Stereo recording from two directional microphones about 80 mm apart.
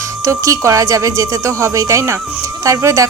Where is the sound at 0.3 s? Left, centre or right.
Right.